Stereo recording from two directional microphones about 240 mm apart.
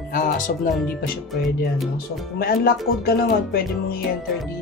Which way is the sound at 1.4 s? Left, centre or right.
Centre.